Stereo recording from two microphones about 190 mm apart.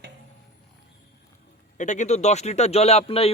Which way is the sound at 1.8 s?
40° left (ahead or behind).